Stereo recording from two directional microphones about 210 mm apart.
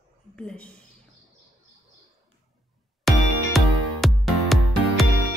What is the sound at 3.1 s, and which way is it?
Music, centre (ahead or behind).